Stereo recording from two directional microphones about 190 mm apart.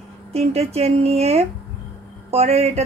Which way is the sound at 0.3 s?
35° right (ahead or behind).